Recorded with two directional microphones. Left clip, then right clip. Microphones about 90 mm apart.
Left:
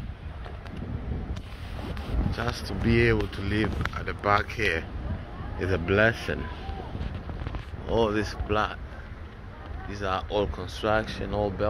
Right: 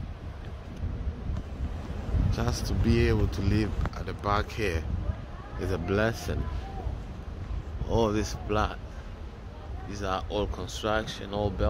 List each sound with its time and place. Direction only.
2.3 s speech: 15° right (ahead or behind)
7.9 s speech: 25° right (ahead or behind)
9.8 s speech: 20° right (ahead or behind)